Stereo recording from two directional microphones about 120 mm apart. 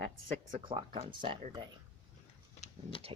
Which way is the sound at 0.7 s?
40° right (ahead or behind).